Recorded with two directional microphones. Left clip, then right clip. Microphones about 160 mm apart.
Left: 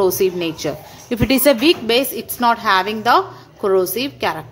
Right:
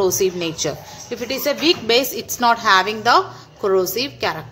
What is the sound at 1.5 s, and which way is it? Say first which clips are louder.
A woman's voice: left 1 dB; 10° left (ahead or behind).